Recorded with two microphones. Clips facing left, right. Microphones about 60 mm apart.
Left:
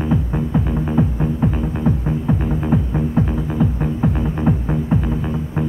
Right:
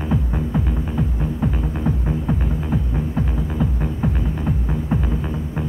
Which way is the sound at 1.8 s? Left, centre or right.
Centre.